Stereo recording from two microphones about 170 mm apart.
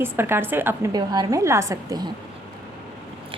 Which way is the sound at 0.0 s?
15° right (ahead or behind).